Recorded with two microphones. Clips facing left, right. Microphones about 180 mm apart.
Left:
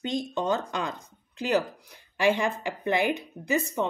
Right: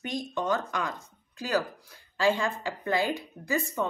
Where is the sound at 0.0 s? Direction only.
25° left (ahead or behind).